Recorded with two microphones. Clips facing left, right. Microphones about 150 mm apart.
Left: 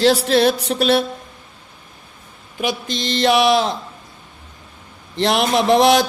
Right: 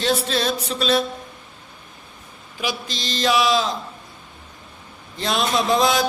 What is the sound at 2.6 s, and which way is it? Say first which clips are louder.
Speech: left 5 dB; 55° left (ahead or behind).